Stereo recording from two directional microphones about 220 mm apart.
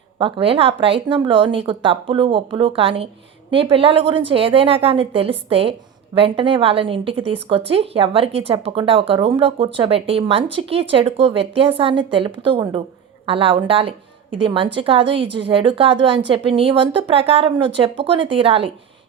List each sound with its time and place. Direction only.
0.2 s speech: 25° right (ahead or behind)